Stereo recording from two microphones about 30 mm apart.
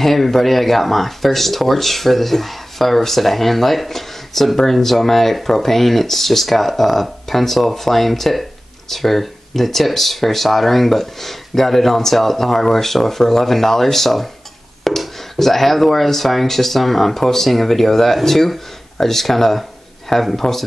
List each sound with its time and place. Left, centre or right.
0.0 s speech: centre
20.1 s speech: centre